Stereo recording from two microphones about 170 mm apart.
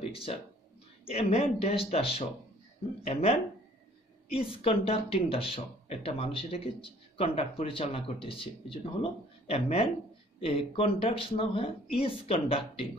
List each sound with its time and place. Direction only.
0.1 s speech: 35° left (ahead or behind)